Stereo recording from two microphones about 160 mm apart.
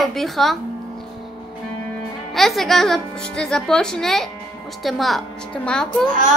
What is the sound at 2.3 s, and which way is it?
Speech, centre (ahead or behind).